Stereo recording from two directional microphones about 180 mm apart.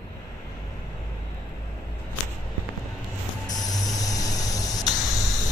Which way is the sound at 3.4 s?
20° left (ahead or behind).